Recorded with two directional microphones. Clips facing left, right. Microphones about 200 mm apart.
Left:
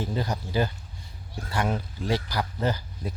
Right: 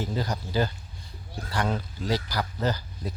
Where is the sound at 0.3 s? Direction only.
25° left (ahead or behind).